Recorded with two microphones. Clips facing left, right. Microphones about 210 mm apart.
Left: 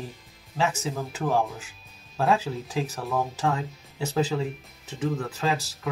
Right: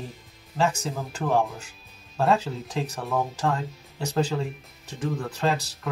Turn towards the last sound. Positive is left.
turn(degrees=5)  # may be behind; listen again after turning